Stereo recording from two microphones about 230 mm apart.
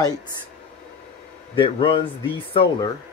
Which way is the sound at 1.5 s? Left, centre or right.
Left.